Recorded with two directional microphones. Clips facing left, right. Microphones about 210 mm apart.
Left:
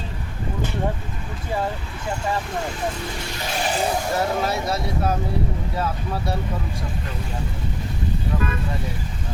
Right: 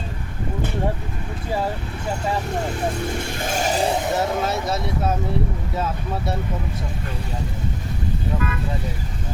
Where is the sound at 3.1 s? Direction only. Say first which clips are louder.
Right 3 dB; 50° right (ahead or behind).